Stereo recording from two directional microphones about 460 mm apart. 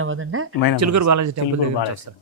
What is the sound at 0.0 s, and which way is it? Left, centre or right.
Speech, right.